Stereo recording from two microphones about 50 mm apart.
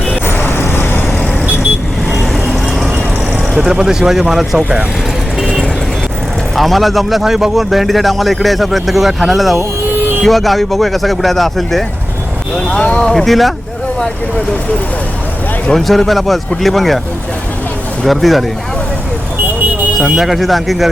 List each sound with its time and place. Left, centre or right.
0.3 s vehicle: left
2.1 s vehicle: centre
3.5 s speech: centre
6.6 s a man's voice: centre
12.7 s speech: left
13.1 s a man's voice: centre
15.7 s a man's voice: centre
18.0 s a man's voice: centre
20.0 s a man's voice: centre